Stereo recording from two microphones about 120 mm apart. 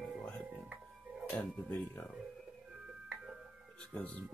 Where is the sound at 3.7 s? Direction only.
10° left (ahead or behind).